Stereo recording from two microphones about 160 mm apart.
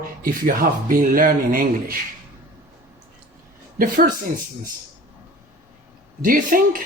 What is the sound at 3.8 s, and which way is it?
Speech, 60° right (ahead or behind).